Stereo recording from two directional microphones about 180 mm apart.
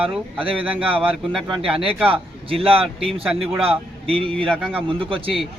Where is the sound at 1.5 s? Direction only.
30° right (ahead or behind).